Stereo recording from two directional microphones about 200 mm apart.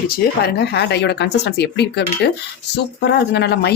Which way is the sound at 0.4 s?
55° left (ahead or behind).